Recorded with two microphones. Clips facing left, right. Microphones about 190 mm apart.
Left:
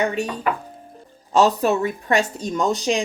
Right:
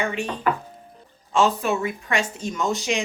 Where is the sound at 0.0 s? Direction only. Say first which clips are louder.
Left 2 dB; 40° left (ahead or behind).